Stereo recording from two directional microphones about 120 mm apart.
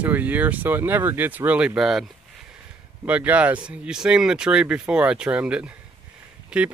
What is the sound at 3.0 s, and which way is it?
Speech, 10° right (ahead or behind).